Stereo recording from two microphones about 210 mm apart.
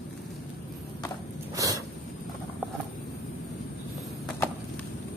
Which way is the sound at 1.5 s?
15° right (ahead or behind).